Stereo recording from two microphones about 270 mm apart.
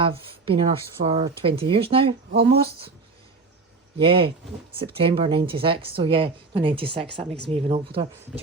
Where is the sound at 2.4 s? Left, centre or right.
Right.